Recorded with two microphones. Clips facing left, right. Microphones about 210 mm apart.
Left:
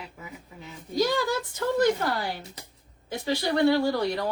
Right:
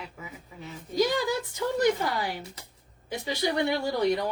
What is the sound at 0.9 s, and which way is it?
Speech, 15° right (ahead or behind).